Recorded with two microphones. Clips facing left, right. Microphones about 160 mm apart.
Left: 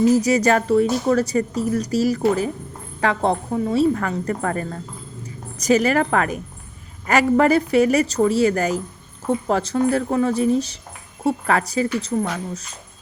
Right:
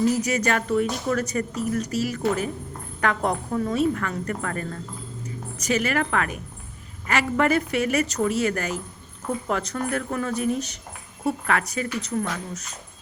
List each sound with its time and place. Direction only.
0.1 s a woman's voice: 35° left (ahead or behind)